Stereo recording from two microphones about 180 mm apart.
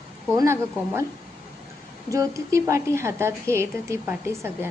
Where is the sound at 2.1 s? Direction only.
15° right (ahead or behind).